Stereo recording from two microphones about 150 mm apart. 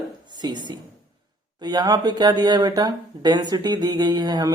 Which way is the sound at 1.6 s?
25° right (ahead or behind).